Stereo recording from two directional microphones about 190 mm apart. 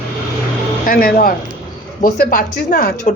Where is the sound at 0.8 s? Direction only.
50° left (ahead or behind).